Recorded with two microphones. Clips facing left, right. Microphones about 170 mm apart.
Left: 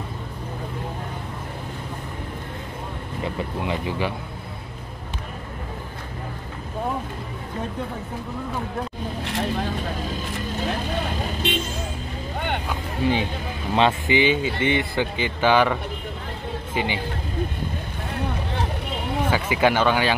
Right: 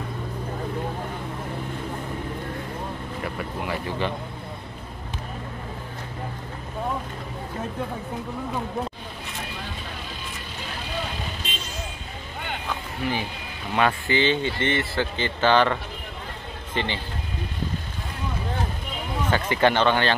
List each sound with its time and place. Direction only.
3.6 s speech: 15° left (ahead or behind)
11.4 s vehicle: 70° left (ahead or behind)
13.0 s speech: 20° left (ahead or behind)
19.3 s speech: 10° left (ahead or behind)